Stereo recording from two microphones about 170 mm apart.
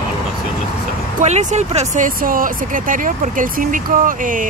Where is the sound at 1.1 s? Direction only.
40° right (ahead or behind).